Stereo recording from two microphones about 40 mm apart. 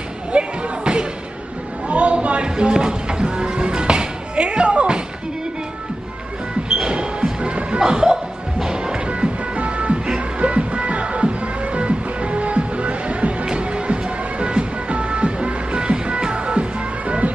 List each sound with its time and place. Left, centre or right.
0.3 s basketball bounce: right
1.9 s a sound: right
2.5 s music: centre
6.7 s music: right